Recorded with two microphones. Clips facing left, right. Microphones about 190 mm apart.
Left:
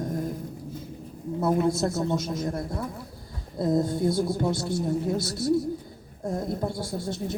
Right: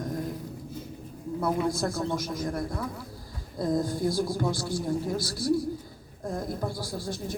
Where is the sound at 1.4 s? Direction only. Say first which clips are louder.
Left 4 dB; 25° left (ahead or behind).